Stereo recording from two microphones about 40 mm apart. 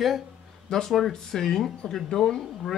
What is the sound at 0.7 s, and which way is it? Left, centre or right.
Speech, centre.